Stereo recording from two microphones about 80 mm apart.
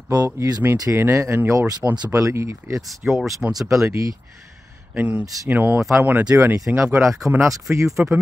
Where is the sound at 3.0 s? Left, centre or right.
Centre.